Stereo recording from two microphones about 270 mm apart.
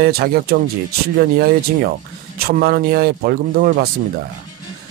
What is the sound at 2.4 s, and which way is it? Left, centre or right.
Speech, right.